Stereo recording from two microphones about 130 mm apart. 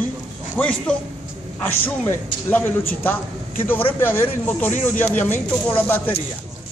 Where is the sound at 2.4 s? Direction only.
15° left (ahead or behind).